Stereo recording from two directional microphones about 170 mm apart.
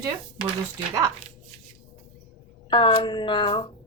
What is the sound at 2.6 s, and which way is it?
Speech, 30° left (ahead or behind).